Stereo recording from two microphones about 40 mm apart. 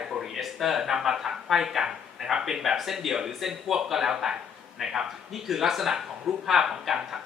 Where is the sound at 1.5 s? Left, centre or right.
Centre.